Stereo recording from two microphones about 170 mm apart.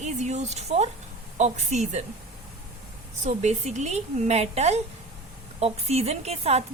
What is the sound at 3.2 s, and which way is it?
A woman's voice, 40° right (ahead or behind).